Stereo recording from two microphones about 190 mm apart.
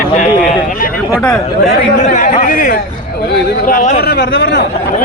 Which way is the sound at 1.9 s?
40° left (ahead or behind).